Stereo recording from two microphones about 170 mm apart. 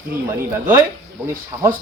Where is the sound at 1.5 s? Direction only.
20° right (ahead or behind).